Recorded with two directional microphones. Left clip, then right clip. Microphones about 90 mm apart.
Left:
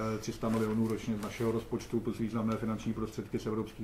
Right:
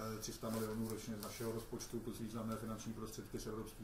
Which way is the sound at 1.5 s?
35° right (ahead or behind).